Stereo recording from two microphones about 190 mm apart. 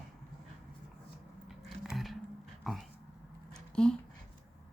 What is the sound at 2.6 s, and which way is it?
Dog, centre (ahead or behind).